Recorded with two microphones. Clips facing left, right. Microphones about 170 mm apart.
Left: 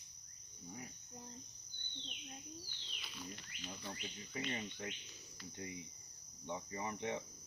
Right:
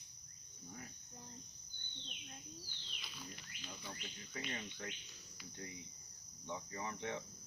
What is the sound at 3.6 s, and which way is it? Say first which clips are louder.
Insect: left 3 dB; 20° left (ahead or behind).